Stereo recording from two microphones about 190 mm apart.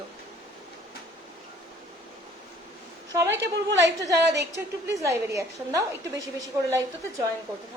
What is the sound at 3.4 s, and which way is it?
Speech, 70° right (ahead or behind).